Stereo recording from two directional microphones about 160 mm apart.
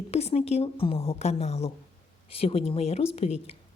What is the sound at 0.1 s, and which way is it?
A woman's voice, 40° left (ahead or behind).